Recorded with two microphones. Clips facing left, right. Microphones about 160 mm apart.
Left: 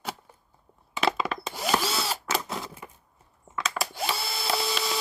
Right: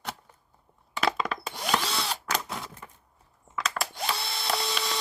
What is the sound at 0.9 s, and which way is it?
Drill, 5° left (ahead or behind).